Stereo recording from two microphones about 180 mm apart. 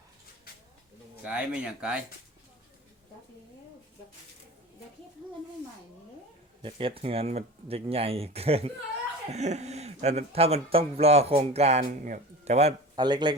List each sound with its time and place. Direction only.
1.2 s speech: 5° right (ahead or behind)
6.6 s speech: 30° right (ahead or behind)
13.0 s speech: 25° right (ahead or behind)